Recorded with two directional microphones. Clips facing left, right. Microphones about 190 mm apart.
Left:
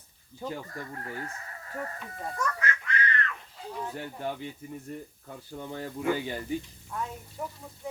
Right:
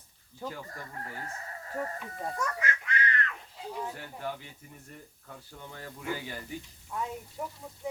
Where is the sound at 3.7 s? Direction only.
10° right (ahead or behind).